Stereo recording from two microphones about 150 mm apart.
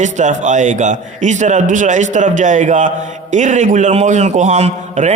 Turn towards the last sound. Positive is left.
turn(degrees=-45)  # may be behind; listen again after turning